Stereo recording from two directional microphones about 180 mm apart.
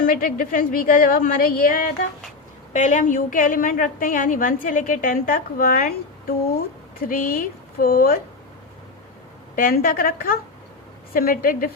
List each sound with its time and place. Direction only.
0.0 s a woman's voice: 50° left (ahead or behind)
9.6 s a woman's voice: 50° left (ahead or behind)